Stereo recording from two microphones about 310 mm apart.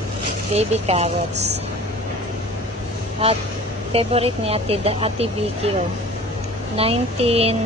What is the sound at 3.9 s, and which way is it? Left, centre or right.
A woman's voice, centre.